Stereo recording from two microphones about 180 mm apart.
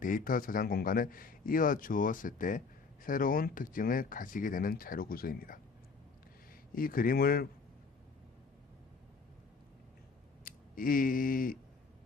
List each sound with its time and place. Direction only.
0.0 s a man's voice: 50° left (ahead or behind)
10.4 s speech: 50° left (ahead or behind)